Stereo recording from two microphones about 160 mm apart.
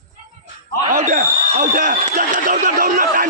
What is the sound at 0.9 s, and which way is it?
Speech, 55° right (ahead or behind).